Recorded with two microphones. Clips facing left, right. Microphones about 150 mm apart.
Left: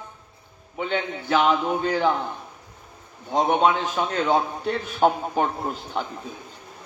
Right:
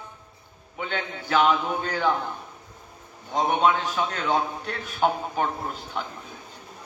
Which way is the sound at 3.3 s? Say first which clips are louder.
Left 2 dB; 45° left (ahead or behind).